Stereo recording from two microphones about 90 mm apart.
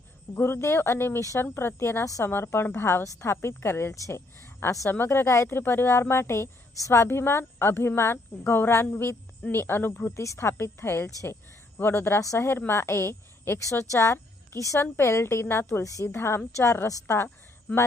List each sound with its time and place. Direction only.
0.3 s a woman's voice: 25° left (ahead or behind)